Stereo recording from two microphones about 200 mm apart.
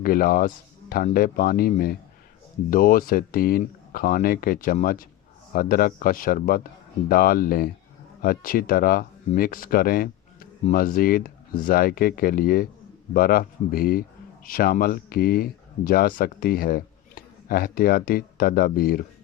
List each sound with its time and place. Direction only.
0.0 s speech: 45° left (ahead or behind)